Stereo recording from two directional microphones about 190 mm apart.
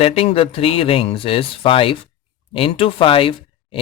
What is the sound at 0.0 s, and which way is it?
A man's voice, 30° left (ahead or behind).